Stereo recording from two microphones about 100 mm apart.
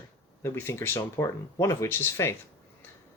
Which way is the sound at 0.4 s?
25° left (ahead or behind).